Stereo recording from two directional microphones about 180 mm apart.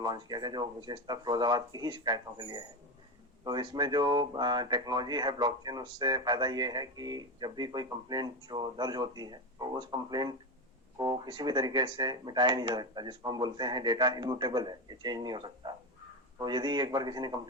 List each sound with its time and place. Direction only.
0.0 s speech: 20° right (ahead or behind)